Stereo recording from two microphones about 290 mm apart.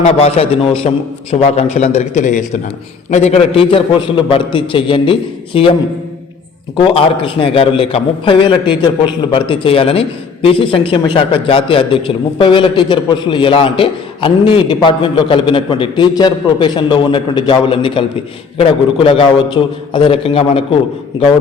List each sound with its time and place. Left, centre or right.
0.0 s a man's voice: left
6.7 s a man's voice: centre